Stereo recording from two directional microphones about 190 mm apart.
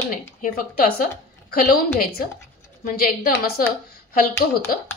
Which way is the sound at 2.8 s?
50° left (ahead or behind).